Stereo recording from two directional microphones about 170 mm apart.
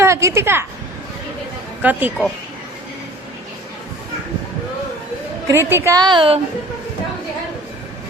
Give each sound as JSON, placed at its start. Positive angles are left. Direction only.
{"t": 0.0, "sound": "speech", "side_deg": -15}
{"t": 1.8, "sound": "a woman's voice", "side_deg": -10}
{"t": 5.5, "sound": "a woman's voice", "side_deg": -15}